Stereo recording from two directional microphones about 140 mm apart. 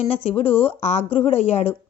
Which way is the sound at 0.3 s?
40° left (ahead or behind).